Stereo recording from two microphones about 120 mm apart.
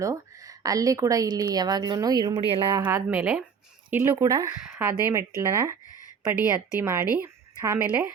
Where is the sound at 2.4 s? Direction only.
50° right (ahead or behind).